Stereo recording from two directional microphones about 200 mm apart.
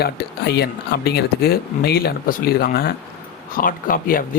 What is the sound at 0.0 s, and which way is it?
Speech, 50° left (ahead or behind).